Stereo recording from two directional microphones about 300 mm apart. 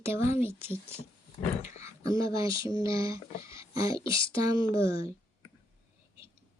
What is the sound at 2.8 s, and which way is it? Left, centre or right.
Speech, centre.